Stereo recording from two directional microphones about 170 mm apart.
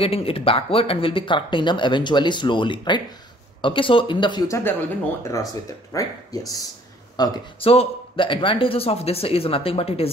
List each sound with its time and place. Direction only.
0.0 s speech: 35° left (ahead or behind)
7.2 s speech: 35° left (ahead or behind)